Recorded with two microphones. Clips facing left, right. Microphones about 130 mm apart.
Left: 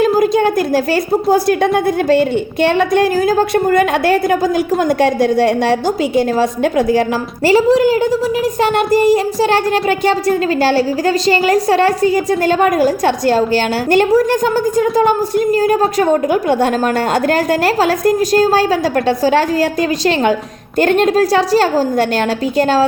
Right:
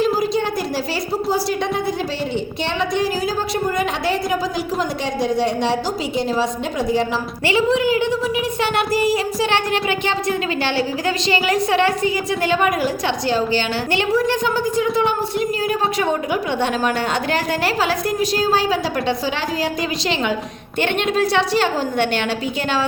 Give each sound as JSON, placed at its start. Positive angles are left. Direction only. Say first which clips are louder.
{"t": 0.0, "sound": "a sound", "louder": "left 7 dB", "side_deg": 55}
{"t": 1.3, "sound": "a woman's voice", "louder": "left 9 dB", "side_deg": 55}
{"t": 7.4, "sound": "a woman's voice", "louder": "left 7 dB", "side_deg": 40}
{"t": 20.7, "sound": "a woman's voice", "louder": "left 8 dB", "side_deg": 40}